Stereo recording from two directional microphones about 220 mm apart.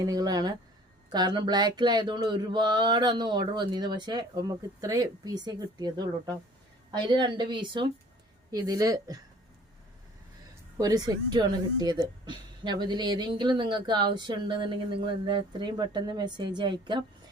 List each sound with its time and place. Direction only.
0.0 s speech: 15° right (ahead or behind)
10.8 s speech: 15° right (ahead or behind)